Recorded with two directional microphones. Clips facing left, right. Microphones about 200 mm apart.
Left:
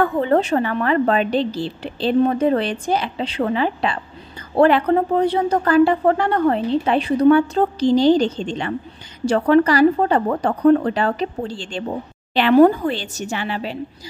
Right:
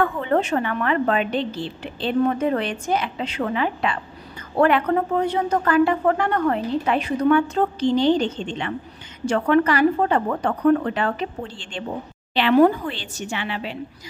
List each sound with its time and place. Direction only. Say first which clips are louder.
0.0 s speech: left 4 dB; 35° left (ahead or behind)